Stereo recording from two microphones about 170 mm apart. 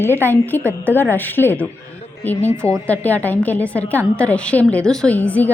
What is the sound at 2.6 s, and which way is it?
Speech, 15° right (ahead or behind).